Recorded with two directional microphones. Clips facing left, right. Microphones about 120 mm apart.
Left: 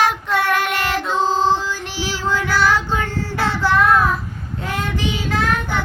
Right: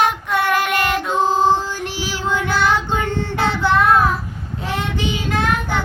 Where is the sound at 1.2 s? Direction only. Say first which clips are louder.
Right 2 dB; 15° right (ahead or behind).